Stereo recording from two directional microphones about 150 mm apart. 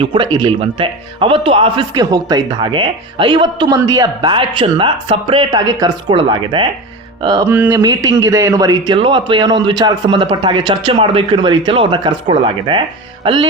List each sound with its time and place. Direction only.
0.0 s a man's voice: 30° right (ahead or behind)
7.4 s speech: 15° right (ahead or behind)
7.8 s a man's voice: 25° right (ahead or behind)